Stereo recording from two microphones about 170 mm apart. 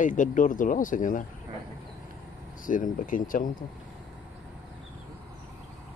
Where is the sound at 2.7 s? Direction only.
50° left (ahead or behind).